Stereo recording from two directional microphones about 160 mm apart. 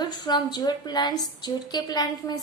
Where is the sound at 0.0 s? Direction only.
25° left (ahead or behind).